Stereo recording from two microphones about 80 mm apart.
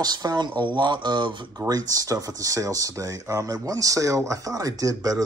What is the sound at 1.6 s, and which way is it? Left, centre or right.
Speech, right.